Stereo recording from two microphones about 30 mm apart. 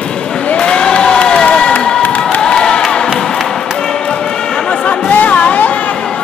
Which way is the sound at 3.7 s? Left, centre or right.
Left.